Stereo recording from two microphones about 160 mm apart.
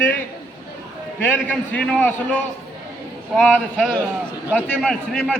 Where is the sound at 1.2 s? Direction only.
10° left (ahead or behind).